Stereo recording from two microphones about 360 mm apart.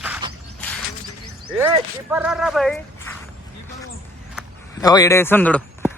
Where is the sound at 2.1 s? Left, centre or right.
Centre.